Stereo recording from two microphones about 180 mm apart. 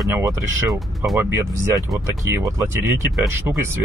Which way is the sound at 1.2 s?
15° right (ahead or behind).